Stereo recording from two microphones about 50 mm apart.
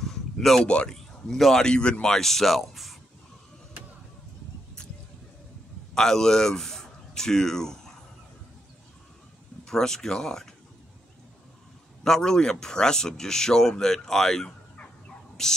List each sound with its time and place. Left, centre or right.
0.0 s a sound: centre
0.7 s a man's voice: left
1.3 s speech: centre
5.9 s speech: centre
9.7 s speech: centre
12.0 s speech: centre